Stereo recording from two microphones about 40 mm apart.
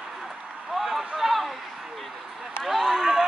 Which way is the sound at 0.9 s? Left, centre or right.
Centre.